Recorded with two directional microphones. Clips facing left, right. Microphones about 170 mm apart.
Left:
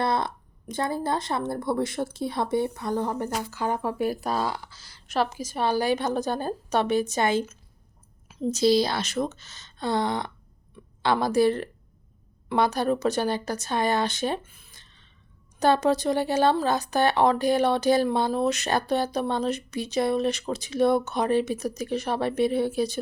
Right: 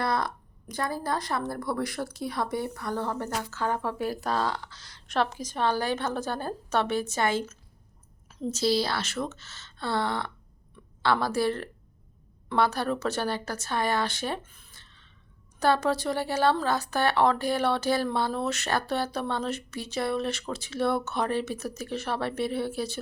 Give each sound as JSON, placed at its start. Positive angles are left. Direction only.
{"t": 0.0, "sound": "speech", "side_deg": 25}
{"t": 14.4, "sound": "a sound", "side_deg": 10}
{"t": 15.5, "sound": "speech", "side_deg": 20}